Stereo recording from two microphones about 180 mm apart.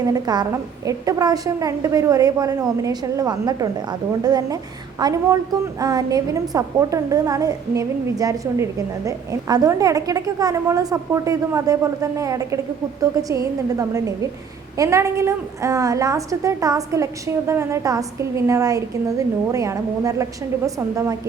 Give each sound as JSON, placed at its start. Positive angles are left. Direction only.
{"t": 0.0, "sound": "a woman's voice", "side_deg": -20}